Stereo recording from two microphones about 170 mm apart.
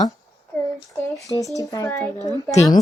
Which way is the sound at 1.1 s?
20° left (ahead or behind).